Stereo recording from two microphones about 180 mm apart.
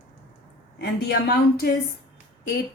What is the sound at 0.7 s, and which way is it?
Speech, 60° left (ahead or behind).